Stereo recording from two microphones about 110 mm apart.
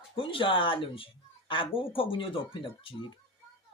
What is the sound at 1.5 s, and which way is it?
Speech, 55° left (ahead or behind).